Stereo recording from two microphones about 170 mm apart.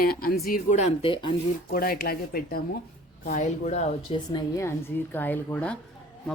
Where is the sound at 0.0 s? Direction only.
60° left (ahead or behind).